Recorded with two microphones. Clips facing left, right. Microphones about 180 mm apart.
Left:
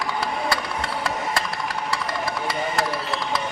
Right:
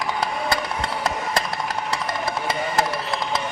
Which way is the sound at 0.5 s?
20° right (ahead or behind).